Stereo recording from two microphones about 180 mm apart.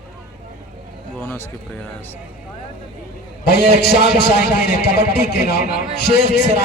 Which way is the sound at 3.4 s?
65° left (ahead or behind).